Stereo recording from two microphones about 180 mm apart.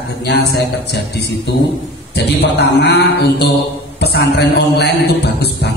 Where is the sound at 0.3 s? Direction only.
65° left (ahead or behind).